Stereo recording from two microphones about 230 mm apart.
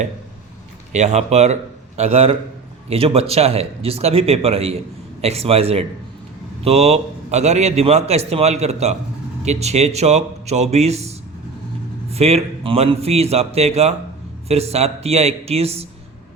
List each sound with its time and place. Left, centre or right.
0.9 s a man's voice: right
12.1 s a man's voice: right